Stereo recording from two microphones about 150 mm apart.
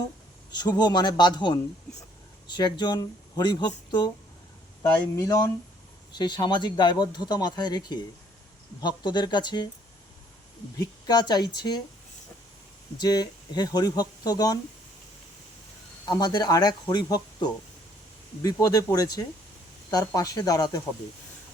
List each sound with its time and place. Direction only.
0.5 s speech: 30° left (ahead or behind)
4.8 s speech: 20° left (ahead or behind)
10.8 s speech: 25° left (ahead or behind)
13.0 s speech: 25° left (ahead or behind)
16.0 s speech: 25° left (ahead or behind)